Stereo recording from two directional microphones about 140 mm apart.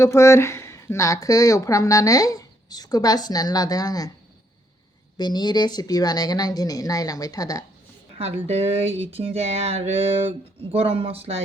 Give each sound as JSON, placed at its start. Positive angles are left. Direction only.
{"t": 0.0, "sound": "speech", "side_deg": 20}
{"t": 5.1, "sound": "speech", "side_deg": 30}
{"t": 8.2, "sound": "speech", "side_deg": -45}